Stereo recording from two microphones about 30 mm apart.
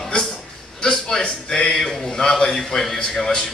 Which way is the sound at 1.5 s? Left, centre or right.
Centre.